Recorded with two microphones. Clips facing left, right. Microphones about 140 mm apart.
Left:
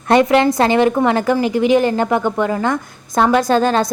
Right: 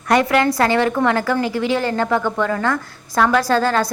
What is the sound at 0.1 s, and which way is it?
Speech, 20° left (ahead or behind).